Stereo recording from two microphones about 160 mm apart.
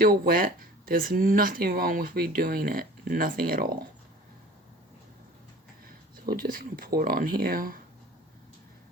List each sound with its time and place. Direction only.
0.0 s speech: 65° right (ahead or behind)
6.3 s speech: 60° right (ahead or behind)